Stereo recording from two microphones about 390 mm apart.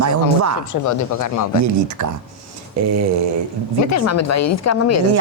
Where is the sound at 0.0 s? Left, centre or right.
Right.